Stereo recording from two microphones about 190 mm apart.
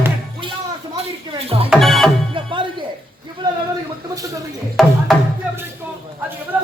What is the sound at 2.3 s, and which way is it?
Music, 25° right (ahead or behind).